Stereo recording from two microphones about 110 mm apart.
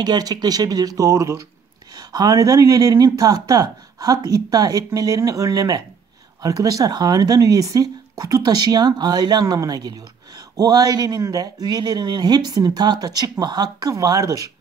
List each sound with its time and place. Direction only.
0.0 s speech: 35° right (ahead or behind)